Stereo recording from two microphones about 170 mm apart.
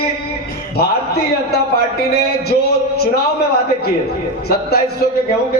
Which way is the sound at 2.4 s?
70° left (ahead or behind).